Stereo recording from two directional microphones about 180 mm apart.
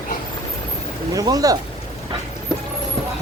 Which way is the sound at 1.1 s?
20° right (ahead or behind).